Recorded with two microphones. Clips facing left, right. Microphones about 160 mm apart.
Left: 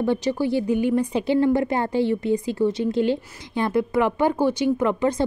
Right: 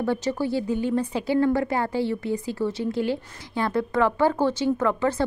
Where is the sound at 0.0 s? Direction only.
15° left (ahead or behind).